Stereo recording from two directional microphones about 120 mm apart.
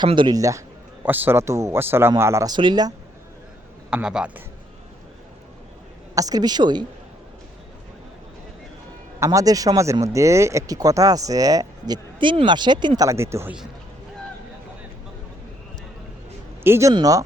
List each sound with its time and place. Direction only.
0.0 s a woman's voice: 40° right (ahead or behind)
0.3 s speech: 25° right (ahead or behind)
1.0 s speech: 15° right (ahead or behind)
2.5 s a woman's voice: 40° right (ahead or behind)
3.8 s a man's voice: 5° right (ahead or behind)
6.1 s a woman's voice: 30° right (ahead or behind)
9.2 s speech: 30° right (ahead or behind)
13.0 s speech: 25° right (ahead or behind)
16.6 s a woman's voice: 20° right (ahead or behind)